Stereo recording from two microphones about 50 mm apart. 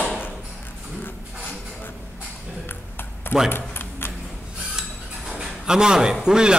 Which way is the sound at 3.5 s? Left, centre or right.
Left.